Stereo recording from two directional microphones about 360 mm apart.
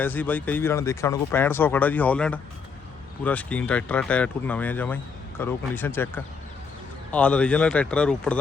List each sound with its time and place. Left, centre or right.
0.0 s speech: centre